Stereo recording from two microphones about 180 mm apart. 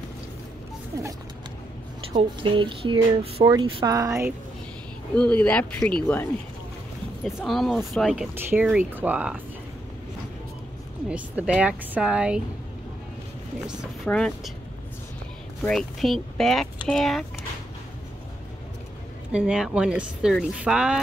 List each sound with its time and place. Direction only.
2.1 s speech: 30° right (ahead or behind)
5.1 s speech: 5° left (ahead or behind)
7.2 s speech: centre (ahead or behind)
11.1 s speech: 5° right (ahead or behind)
14.0 s speech: 5° left (ahead or behind)
15.6 s speech: centre (ahead or behind)
19.3 s speech: 5° right (ahead or behind)